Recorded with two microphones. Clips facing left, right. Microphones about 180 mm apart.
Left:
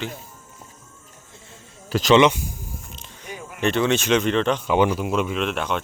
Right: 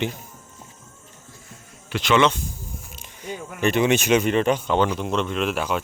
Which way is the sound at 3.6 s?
10° right (ahead or behind).